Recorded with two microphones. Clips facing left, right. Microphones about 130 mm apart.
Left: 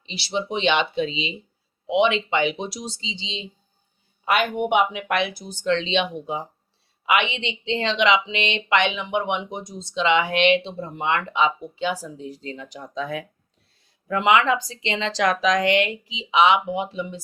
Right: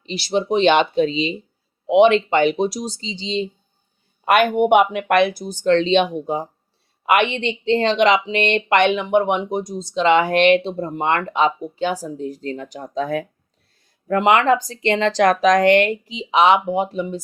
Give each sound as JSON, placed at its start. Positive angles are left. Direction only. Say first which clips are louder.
{"t": 0.0, "sound": "speech", "louder": "right 6 dB", "side_deg": -45}
{"t": 4.3, "sound": "speech", "louder": "right 7 dB", "side_deg": -55}